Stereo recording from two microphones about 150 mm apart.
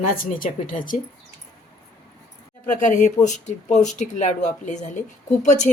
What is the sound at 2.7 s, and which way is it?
A woman's voice, 60° left (ahead or behind).